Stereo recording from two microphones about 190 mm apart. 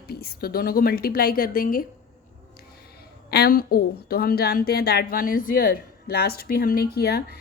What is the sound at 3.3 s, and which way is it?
A woman's voice, 55° left (ahead or behind).